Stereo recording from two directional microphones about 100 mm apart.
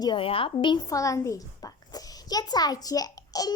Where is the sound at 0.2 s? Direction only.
65° left (ahead or behind).